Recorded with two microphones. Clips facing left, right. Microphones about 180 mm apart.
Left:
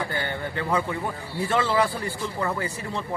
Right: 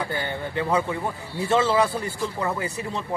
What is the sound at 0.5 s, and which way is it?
A man's voice, 20° right (ahead or behind).